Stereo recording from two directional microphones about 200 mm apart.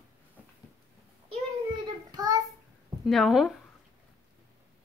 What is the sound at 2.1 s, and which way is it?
Child singing, 20° right (ahead or behind).